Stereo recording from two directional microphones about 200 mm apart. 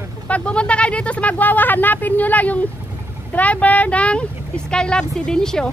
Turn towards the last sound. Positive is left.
turn(degrees=5)  # may be behind; listen again after turning